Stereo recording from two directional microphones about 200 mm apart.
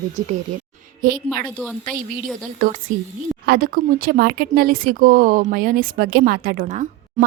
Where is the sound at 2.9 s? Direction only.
40° right (ahead or behind).